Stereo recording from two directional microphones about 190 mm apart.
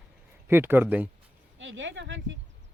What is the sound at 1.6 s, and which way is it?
Speech, 80° right.